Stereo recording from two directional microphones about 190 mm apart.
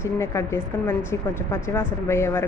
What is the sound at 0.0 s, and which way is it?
A woman's voice, 15° left (ahead or behind).